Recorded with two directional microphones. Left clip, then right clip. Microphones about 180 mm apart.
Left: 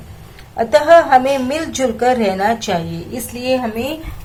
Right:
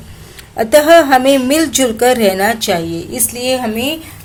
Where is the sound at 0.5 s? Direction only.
40° right (ahead or behind).